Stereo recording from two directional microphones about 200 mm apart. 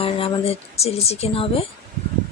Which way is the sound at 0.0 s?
30° left (ahead or behind).